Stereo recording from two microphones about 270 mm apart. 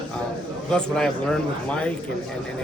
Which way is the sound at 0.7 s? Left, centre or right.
Centre.